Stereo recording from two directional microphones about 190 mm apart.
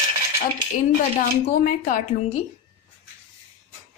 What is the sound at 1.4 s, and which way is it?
Speech, 45° left (ahead or behind).